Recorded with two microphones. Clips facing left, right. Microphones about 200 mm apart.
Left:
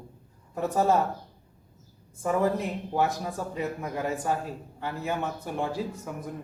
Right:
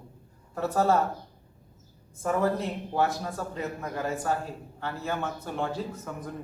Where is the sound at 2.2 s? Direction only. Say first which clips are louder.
Left 1 dB; 15° left (ahead or behind).